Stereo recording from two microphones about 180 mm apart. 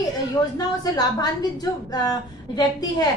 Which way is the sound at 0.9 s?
20° left (ahead or behind).